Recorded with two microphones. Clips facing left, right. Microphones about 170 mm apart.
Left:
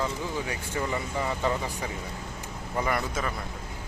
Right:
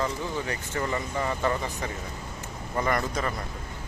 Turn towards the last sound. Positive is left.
turn(degrees=5)  # may be behind; listen again after turning